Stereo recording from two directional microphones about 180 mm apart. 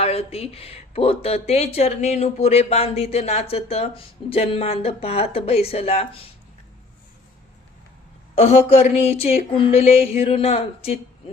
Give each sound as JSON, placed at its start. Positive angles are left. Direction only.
{"t": 0.0, "sound": "speech", "side_deg": 35}
{"t": 8.4, "sound": "speech", "side_deg": 35}